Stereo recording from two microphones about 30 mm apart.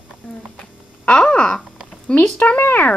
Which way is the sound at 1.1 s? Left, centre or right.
Left.